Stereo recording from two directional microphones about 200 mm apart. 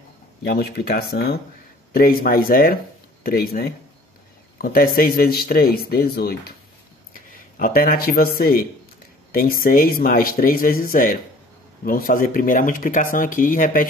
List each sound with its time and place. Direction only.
0.4 s speech: 50° left (ahead or behind)
7.5 s speech: 45° left (ahead or behind)